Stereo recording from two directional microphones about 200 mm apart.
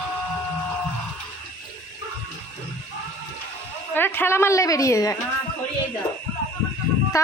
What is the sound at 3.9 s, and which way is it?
A woman's voice, 10° left (ahead or behind).